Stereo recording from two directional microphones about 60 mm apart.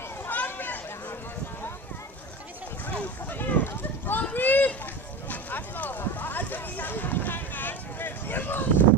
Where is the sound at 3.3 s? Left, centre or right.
Left.